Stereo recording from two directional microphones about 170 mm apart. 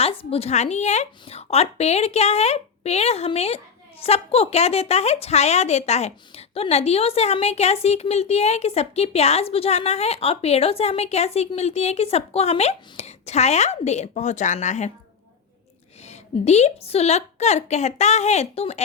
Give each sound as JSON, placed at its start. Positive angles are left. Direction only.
{"t": 0.0, "sound": "a woman's voice", "side_deg": 35}
{"t": 16.0, "sound": "a woman's voice", "side_deg": 40}